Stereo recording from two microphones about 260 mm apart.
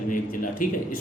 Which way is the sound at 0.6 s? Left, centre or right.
Left.